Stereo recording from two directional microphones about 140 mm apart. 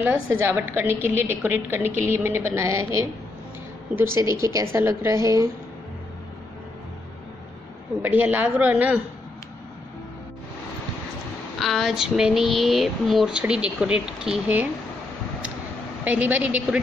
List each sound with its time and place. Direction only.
0.0 s a woman's voice: 15° right (ahead or behind)
8.0 s a woman's voice: 15° right (ahead or behind)
11.6 s speech: centre (ahead or behind)
16.0 s a woman's voice: 10° right (ahead or behind)